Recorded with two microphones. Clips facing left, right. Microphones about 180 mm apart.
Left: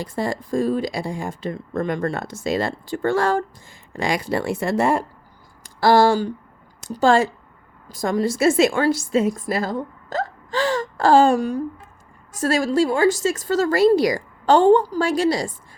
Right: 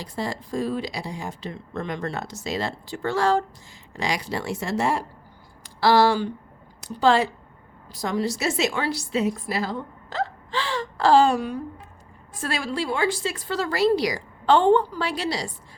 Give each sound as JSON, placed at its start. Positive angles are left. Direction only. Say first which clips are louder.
{"t": 0.0, "sound": "a woman's voice", "louder": "left 5 dB", "side_deg": 50}